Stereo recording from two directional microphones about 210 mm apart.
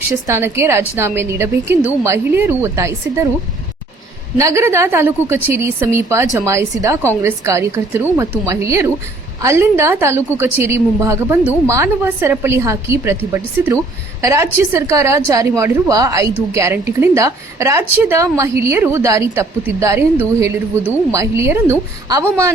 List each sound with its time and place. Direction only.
0.1 s a woman's voice: 15° right (ahead or behind)
4.4 s a woman's voice: 15° right (ahead or behind)